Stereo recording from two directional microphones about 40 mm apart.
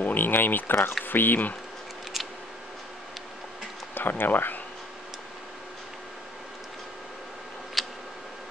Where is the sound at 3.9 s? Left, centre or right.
Left.